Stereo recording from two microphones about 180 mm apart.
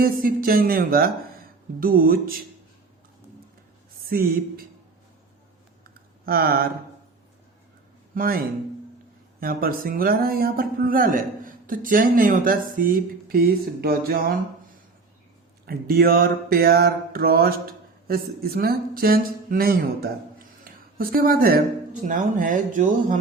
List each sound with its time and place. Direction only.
0.0 s speech: 55° right (ahead or behind)
4.1 s speech: 55° right (ahead or behind)
6.2 s speech: 55° right (ahead or behind)
8.1 s speech: 50° right (ahead or behind)
9.4 s speech: 55° right (ahead or behind)
15.6 s mantra: 60° right (ahead or behind)
22.0 s speech: 45° right (ahead or behind)